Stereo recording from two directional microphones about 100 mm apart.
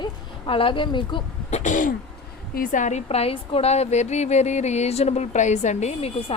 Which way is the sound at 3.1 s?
85° left.